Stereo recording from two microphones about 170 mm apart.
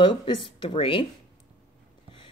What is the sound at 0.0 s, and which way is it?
Speech, 30° left (ahead or behind).